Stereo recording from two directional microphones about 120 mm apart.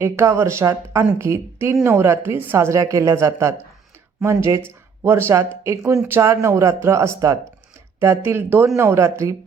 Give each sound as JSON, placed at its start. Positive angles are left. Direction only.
{"t": 0.0, "sound": "a woman's voice", "side_deg": -20}